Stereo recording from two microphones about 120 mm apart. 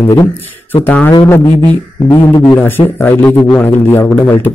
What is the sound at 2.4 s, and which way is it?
A man's voice, 15° left (ahead or behind).